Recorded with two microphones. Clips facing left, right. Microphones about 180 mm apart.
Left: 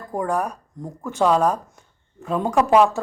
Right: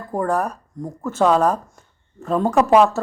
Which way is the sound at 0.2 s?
10° left (ahead or behind).